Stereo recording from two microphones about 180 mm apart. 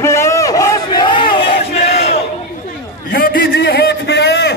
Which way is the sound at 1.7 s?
35° left (ahead or behind).